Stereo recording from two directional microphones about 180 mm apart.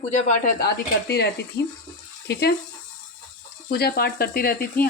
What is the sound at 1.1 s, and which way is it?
Speech, 65° left (ahead or behind).